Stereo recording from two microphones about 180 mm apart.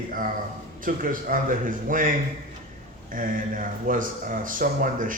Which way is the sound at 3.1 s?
50° right (ahead or behind).